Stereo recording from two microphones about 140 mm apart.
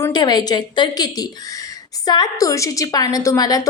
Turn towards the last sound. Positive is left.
turn(degrees=25)  # may be behind; listen again after turning